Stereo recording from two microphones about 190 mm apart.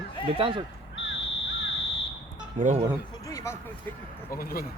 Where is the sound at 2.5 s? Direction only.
40° right (ahead or behind).